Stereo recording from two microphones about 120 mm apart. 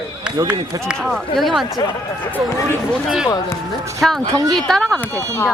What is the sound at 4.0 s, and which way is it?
Speech, centre (ahead or behind).